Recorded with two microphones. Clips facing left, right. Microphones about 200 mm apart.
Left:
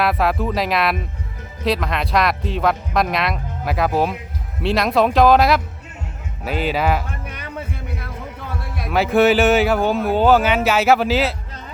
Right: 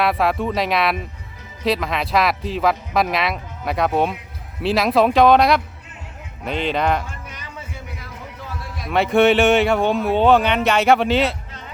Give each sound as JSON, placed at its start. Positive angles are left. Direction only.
{"t": 0.0, "sound": "speech", "side_deg": 0}
{"t": 7.1, "sound": "heart sounds", "side_deg": 55}
{"t": 8.9, "sound": "speech", "side_deg": 0}